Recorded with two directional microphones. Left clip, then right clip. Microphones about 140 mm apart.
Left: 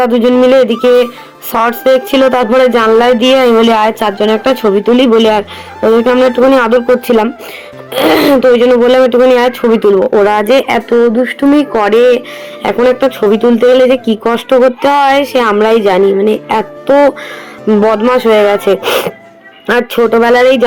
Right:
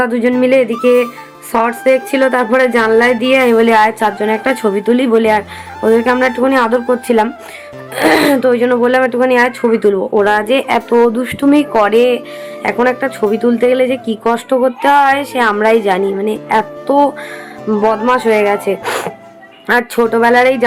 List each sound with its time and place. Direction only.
0.0 s speech: 35° left (ahead or behind)
4.4 s speech: 10° left (ahead or behind)
6.5 s speech: 35° left (ahead or behind)
9.3 s speech: 40° left (ahead or behind)
9.6 s speech: 25° left (ahead or behind)
10.8 s speech: 5° right (ahead or behind)
11.5 s speech: 10° left (ahead or behind)
11.9 s speech: 20° left (ahead or behind)
17.8 s speech: 30° left (ahead or behind)
18.8 s speech: 10° left (ahead or behind)